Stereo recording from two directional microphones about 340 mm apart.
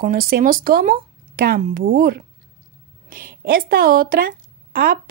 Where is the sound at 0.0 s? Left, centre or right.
Right.